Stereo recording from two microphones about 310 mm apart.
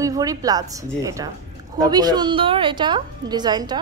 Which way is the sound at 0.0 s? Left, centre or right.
Centre.